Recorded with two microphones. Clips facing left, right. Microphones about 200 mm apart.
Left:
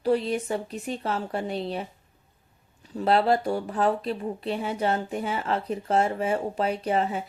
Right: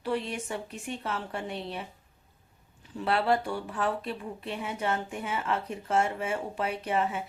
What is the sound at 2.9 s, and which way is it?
A woman's voice, 40° left (ahead or behind).